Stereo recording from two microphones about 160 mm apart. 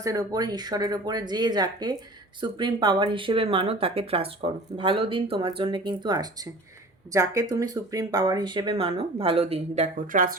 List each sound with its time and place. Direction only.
0.0 s speech: 20° right (ahead or behind); by 10.3 s 60° right (ahead or behind)